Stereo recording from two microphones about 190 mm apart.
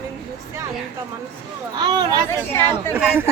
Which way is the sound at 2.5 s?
10° left (ahead or behind).